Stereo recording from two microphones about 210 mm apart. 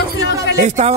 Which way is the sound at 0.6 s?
35° right (ahead or behind).